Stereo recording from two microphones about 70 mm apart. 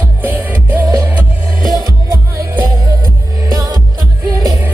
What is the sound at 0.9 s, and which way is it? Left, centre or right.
Music, right.